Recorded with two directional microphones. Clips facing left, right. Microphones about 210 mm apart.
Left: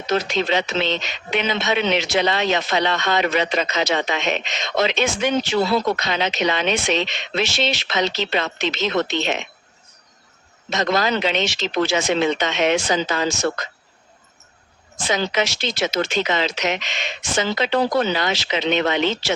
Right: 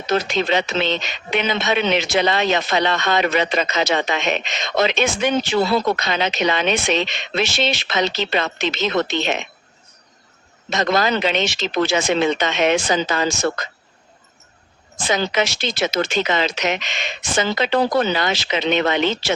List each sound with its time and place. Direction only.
0.1 s speech: 55° right (ahead or behind)
10.7 s speech: 55° right (ahead or behind)
15.0 s speech: 55° right (ahead or behind)